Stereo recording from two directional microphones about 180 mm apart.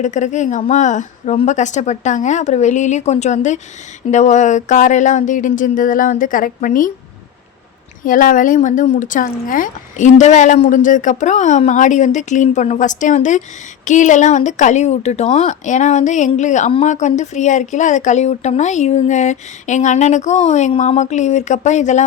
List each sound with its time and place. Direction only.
0.0 s speech: 40° left (ahead or behind)
8.0 s speech: 45° left (ahead or behind)